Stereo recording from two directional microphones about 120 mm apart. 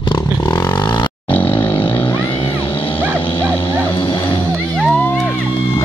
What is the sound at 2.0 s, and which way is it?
Vehicle, 15° left (ahead or behind).